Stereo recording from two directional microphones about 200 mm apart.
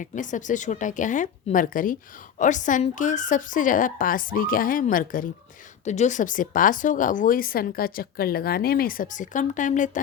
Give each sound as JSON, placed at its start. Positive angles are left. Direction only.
{"t": 0.0, "sound": "speech", "side_deg": 40}